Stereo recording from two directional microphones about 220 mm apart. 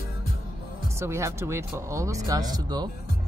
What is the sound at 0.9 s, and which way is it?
Speech, 10° right (ahead or behind).